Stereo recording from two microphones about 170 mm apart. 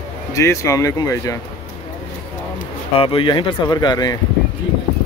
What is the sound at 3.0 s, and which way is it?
Speech, 30° left (ahead or behind).